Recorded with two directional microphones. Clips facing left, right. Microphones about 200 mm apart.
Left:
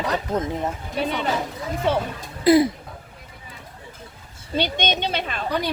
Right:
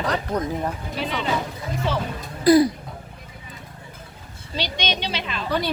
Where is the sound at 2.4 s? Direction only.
25° left (ahead or behind).